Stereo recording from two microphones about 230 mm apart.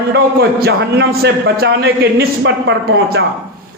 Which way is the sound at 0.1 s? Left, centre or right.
Right.